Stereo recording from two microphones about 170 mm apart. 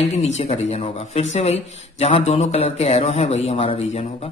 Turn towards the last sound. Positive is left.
turn(degrees=35)  # may be behind; listen again after turning